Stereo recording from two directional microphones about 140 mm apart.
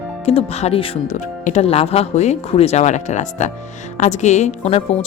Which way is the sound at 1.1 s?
55° left (ahead or behind).